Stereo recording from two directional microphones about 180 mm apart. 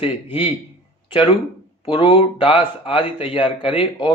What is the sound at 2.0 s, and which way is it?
Speech, 30° left (ahead or behind).